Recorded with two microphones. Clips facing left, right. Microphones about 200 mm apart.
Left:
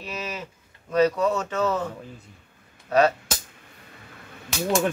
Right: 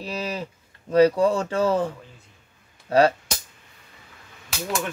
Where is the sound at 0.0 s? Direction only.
30° right (ahead or behind).